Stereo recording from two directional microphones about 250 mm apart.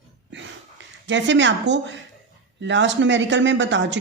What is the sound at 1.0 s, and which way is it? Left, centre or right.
Speech, right.